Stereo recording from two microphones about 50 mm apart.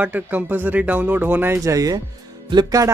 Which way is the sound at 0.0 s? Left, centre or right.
Right.